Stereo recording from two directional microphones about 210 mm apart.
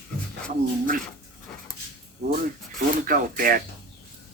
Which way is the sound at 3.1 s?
40° right (ahead or behind).